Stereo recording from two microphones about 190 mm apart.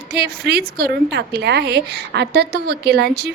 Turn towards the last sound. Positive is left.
turn(degrees=-60)  # may be behind; listen again after turning